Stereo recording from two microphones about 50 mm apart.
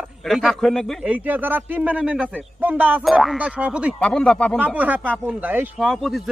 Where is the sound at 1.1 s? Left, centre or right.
Right.